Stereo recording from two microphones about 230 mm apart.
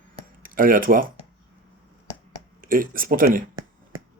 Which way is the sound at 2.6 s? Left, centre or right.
Right.